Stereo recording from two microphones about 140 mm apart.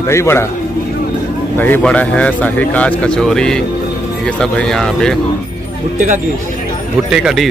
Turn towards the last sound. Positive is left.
turn(degrees=-5)  # may be behind; listen again after turning